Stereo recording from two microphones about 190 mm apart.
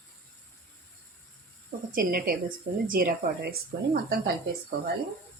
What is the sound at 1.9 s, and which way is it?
Speech, 50° right (ahead or behind).